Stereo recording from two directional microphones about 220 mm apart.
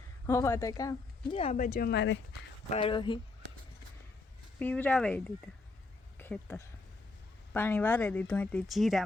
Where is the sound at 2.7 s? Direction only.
25° left (ahead or behind).